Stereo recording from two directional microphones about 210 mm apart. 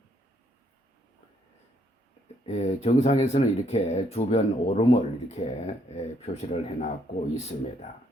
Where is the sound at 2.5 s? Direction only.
30° left (ahead or behind).